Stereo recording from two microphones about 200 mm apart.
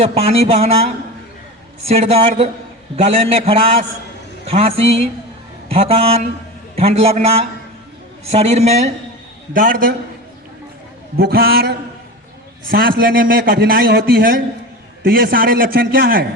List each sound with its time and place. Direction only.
0.0 s a man's voice: 30° right (ahead or behind)
1.9 s a man's voice: 30° right (ahead or behind)
9.5 s a man's voice: 45° right (ahead or behind)
11.2 s a man's voice: 50° right (ahead or behind)